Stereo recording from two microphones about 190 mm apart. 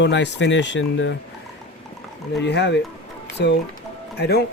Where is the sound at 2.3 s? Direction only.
65° left (ahead or behind).